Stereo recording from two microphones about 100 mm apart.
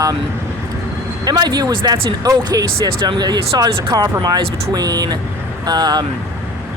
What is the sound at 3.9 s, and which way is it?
Speech, 40° right (ahead or behind).